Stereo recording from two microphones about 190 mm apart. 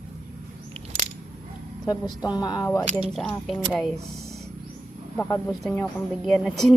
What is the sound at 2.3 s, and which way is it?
Speech, 20° left (ahead or behind).